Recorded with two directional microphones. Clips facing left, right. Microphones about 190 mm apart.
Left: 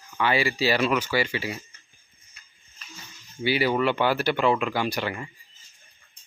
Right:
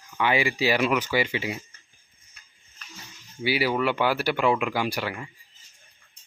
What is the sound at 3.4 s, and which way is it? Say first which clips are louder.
Speech: left 1 dB; 5° right (ahead or behind).